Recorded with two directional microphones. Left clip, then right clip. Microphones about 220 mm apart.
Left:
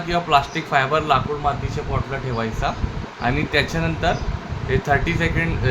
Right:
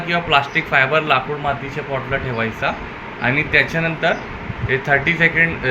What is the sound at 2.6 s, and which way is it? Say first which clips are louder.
Speech: right 3 dB; 15° left (ahead or behind).